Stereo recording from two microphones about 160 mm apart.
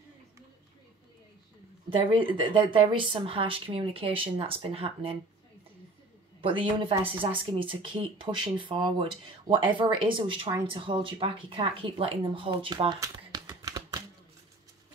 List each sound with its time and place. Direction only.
1.9 s speech: 35° right (ahead or behind)
6.4 s speech: 35° right (ahead or behind)
13.0 s a sound: 25° right (ahead or behind)